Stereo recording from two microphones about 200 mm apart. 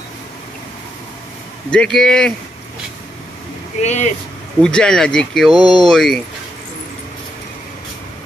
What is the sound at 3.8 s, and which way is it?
Speech, 35° left (ahead or behind).